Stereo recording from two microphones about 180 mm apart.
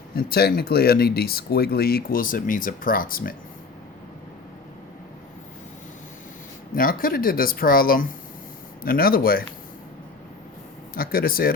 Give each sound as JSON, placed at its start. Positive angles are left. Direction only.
{"t": 0.2, "sound": "speech", "side_deg": 60}
{"t": 6.7, "sound": "speech", "side_deg": 50}
{"t": 10.9, "sound": "speech", "side_deg": 55}